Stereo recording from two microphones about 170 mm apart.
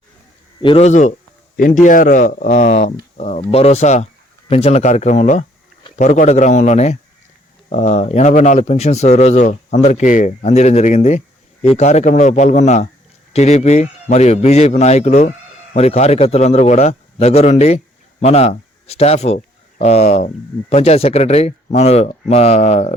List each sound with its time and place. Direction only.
0.6 s speech: 30° left (ahead or behind)
0.9 s speech: 45° left (ahead or behind)